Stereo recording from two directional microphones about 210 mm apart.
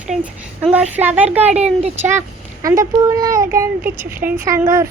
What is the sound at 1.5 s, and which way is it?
Speech, 30° right (ahead or behind).